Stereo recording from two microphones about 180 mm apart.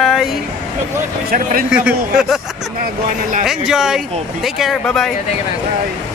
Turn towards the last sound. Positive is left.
turn(degrees=0)  # may be behind; listen again after turning